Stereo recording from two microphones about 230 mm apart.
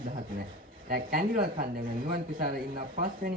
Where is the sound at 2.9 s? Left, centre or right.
Right.